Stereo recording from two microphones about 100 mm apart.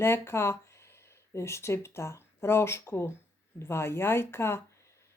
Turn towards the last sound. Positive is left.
turn(degrees=25)  # may be behind; listen again after turning